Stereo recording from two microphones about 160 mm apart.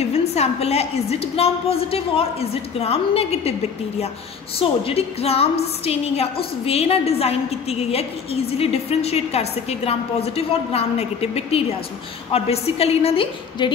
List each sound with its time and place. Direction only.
0.2 s a woman's voice: 40° left (ahead or behind)
4.6 s a woman's voice: 40° left (ahead or behind)